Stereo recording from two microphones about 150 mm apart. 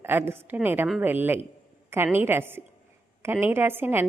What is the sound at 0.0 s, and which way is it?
A woman's voice, 15° right (ahead or behind).